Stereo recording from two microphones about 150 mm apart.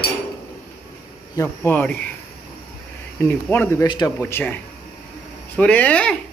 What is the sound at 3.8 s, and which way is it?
Speech, 30° left (ahead or behind).